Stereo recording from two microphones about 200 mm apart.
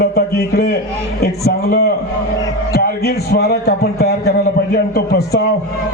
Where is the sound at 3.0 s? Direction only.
50° left (ahead or behind).